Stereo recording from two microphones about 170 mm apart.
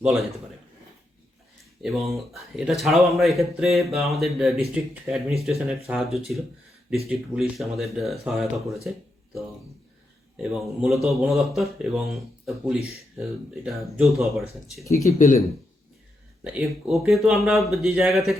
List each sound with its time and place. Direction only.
0.0 s speech: centre (ahead or behind)
1.8 s speech: centre (ahead or behind)
10.3 s speech: centre (ahead or behind)
13.8 s speech: centre (ahead or behind)
14.8 s speech: 20° left (ahead or behind)
16.4 s speech: 5° right (ahead or behind)